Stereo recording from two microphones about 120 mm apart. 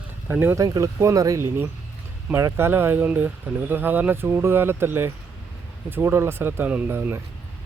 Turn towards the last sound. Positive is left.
turn(degrees=-15)  # may be behind; listen again after turning